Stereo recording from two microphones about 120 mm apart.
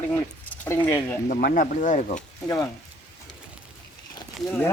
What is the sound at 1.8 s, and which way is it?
Speech, 90° left.